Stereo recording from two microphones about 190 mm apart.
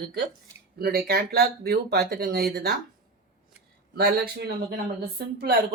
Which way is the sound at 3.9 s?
55° right (ahead or behind).